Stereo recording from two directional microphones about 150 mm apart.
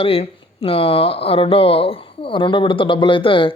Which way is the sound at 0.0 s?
40° left (ahead or behind).